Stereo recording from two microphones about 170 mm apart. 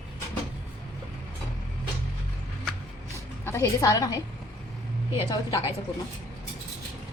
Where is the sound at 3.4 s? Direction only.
15° left (ahead or behind).